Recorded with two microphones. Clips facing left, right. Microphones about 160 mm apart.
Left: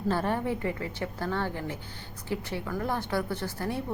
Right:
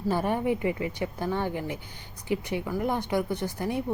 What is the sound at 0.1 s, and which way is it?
Speech, 15° right (ahead or behind).